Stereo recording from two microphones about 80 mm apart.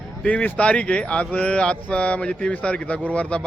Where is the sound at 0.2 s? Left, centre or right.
Centre.